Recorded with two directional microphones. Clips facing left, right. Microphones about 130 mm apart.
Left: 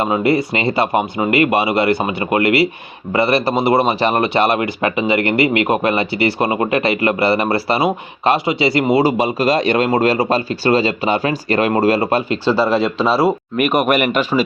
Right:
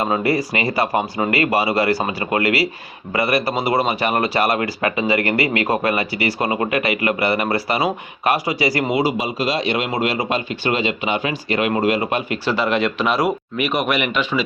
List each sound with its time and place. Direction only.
0.0 s a man's voice: 25° left (ahead or behind)
9.0 s a man's voice: 50° left (ahead or behind); by 13.3 s 30° left (ahead or behind)
13.6 s speech: 50° left (ahead or behind)